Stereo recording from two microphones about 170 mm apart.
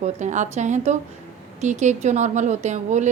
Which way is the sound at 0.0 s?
45° right (ahead or behind).